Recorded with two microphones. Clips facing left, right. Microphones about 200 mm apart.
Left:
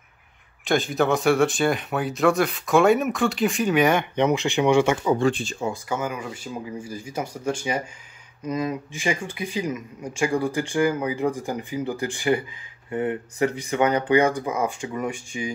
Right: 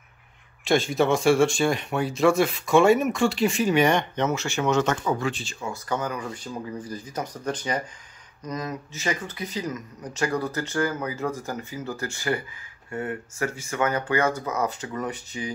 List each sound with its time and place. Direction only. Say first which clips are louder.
0.7 s speech: even; centre (ahead or behind)